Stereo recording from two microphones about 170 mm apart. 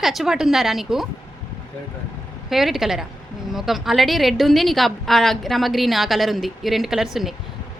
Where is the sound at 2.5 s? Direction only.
Centre (ahead or behind).